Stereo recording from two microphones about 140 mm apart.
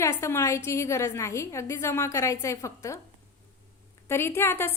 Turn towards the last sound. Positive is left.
turn(degrees=15)  # may be behind; listen again after turning